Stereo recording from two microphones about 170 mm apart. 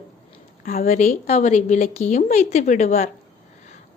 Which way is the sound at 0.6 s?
55° left (ahead or behind).